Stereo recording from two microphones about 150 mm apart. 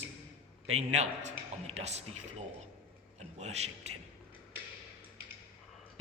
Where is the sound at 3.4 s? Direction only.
45° right (ahead or behind).